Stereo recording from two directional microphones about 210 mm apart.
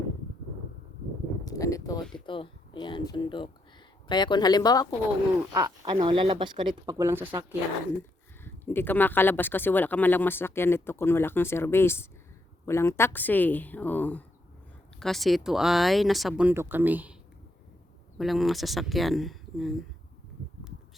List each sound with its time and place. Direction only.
1.5 s speech: 15° left (ahead or behind)
5.5 s speech: 15° right (ahead or behind)
8.4 s speech: 10° left (ahead or behind); by 17.2 s 10° right (ahead or behind)
18.2 s speech: centre (ahead or behind)